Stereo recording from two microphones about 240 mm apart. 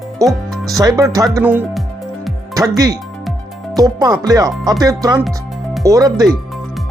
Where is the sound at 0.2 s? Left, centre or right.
Centre.